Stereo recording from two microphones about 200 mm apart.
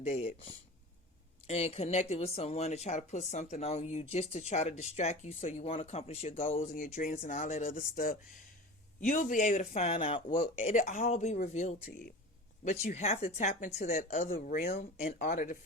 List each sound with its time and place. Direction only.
0.0 s speech: 35° left (ahead or behind)
12.8 s speech: 30° left (ahead or behind)
14.1 s speech: 35° left (ahead or behind)
14.3 s speech: 45° left (ahead or behind)